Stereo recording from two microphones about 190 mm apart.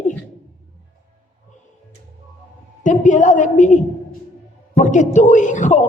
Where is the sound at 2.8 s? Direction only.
40° left (ahead or behind).